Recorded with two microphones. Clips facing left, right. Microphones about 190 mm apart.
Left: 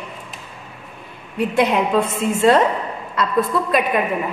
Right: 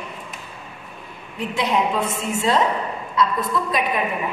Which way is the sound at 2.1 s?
55° left (ahead or behind).